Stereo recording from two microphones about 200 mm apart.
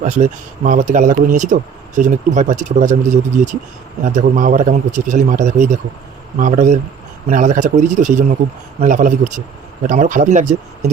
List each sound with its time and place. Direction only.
0.0 s a man's voice: 35° right (ahead or behind)